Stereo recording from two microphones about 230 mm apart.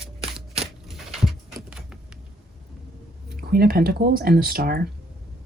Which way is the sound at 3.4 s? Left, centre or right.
Right.